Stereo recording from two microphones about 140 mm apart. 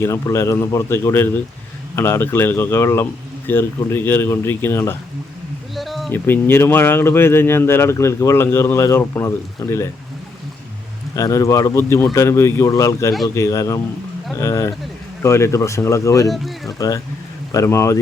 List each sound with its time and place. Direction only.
0.0 s speech: 20° left (ahead or behind)
5.7 s a sound: centre (ahead or behind)
6.1 s speech: 15° left (ahead or behind)
11.1 s speech: 25° left (ahead or behind)
16.3 s speech: centre (ahead or behind)
16.7 s speech: 25° left (ahead or behind)